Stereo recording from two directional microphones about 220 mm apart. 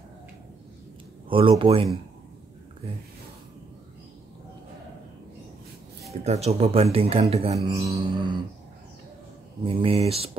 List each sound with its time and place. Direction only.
1.3 s speech: 25° right (ahead or behind)
6.2 s speech: 30° right (ahead or behind)
7.5 s speech: 15° right (ahead or behind)
9.7 s speech: 25° right (ahead or behind)